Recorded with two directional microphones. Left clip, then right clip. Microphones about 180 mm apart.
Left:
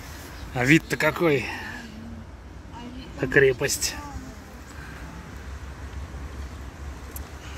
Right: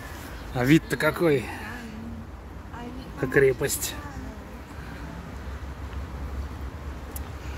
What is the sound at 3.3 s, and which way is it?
Speech, 15° left (ahead or behind).